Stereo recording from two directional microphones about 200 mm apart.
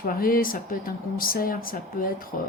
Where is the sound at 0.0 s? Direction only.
45° left (ahead or behind).